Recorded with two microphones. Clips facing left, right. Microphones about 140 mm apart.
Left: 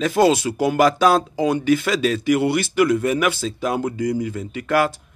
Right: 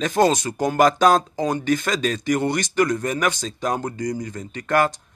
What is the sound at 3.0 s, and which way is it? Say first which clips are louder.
Speech: left 3 dB; 40° right (ahead or behind).